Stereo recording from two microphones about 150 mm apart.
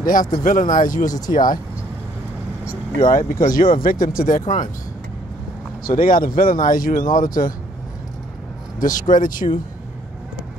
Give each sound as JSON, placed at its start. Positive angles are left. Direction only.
{"t": 0.0, "sound": "speech", "side_deg": 65}
{"t": 3.0, "sound": "speech", "side_deg": 65}
{"t": 5.9, "sound": "speech", "side_deg": 70}
{"t": 8.7, "sound": "speech", "side_deg": 60}